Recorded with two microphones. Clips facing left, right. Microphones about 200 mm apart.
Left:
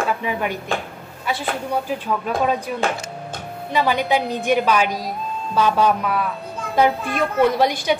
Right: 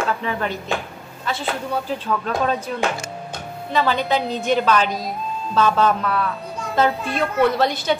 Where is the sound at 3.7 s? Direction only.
15° left (ahead or behind).